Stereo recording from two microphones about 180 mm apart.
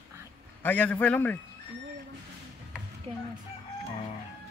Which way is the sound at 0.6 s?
10° left (ahead or behind).